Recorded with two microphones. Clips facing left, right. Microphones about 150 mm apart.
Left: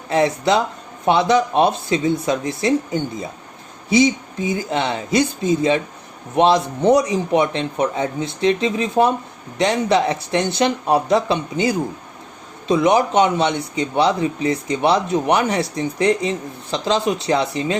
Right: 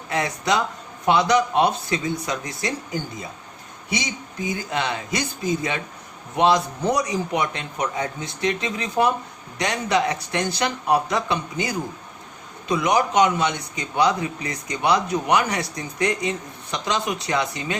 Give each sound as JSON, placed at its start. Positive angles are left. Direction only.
{"t": 0.1, "sound": "a man's voice", "side_deg": 25}